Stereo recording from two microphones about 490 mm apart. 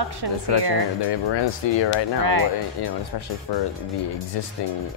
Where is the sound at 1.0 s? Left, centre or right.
Left.